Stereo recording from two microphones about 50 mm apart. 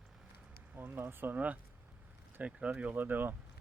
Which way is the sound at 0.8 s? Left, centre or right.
Right.